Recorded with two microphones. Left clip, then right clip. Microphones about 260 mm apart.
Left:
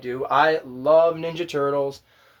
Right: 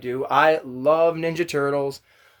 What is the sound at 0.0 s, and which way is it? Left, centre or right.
Speech, right.